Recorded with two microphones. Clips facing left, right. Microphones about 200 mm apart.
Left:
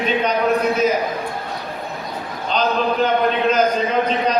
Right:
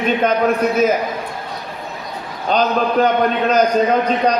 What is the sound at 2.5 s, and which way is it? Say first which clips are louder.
Speech: right 3 dB; 45° right (ahead or behind).